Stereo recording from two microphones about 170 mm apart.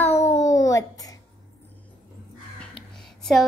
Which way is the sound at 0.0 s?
15° left (ahead or behind).